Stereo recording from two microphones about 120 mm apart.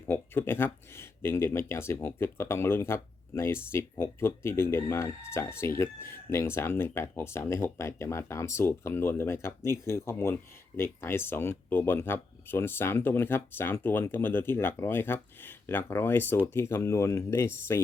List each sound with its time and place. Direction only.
0.1 s speech: 20° left (ahead or behind)